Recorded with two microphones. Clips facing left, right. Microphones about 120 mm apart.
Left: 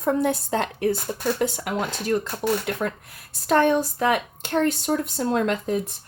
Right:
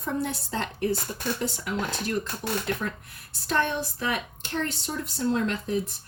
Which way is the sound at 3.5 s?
50° left (ahead or behind).